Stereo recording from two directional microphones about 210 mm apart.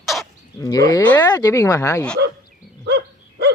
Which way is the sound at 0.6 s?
15° left (ahead or behind).